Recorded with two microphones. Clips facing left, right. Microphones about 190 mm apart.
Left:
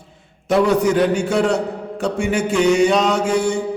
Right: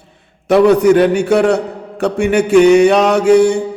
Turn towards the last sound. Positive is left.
turn(degrees=-65)  # may be behind; listen again after turning